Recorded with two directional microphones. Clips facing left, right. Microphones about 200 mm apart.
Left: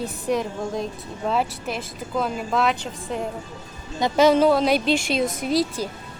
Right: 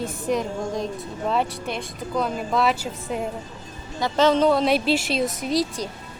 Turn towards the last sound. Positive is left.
turn(degrees=0)  # may be behind; listen again after turning